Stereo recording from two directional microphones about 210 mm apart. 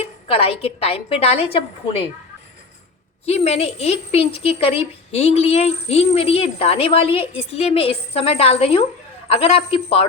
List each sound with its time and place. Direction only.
0.0 s a woman's voice: 25° left (ahead or behind)
3.2 s a woman's voice: 30° left (ahead or behind)